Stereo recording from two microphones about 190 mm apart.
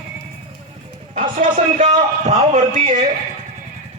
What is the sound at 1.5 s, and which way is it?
A man's voice, 35° right (ahead or behind).